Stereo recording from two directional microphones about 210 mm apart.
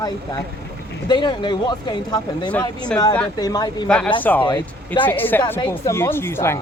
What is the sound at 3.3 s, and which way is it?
Speech, 20° left (ahead or behind).